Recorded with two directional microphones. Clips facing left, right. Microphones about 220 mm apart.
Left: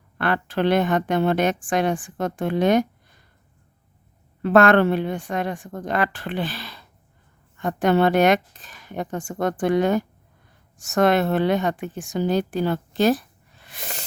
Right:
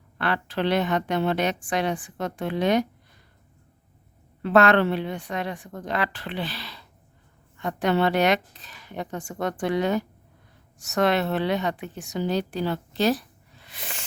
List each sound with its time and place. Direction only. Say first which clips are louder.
0.2 s a woman's voice: left 4 dB; 50° left (ahead or behind)
4.4 s a woman's voice: left 3 dB; 50° left (ahead or behind)